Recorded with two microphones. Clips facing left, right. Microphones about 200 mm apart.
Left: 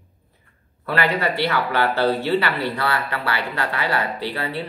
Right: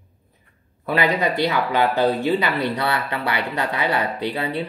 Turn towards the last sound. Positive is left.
turn(degrees=-15)  # may be behind; listen again after turning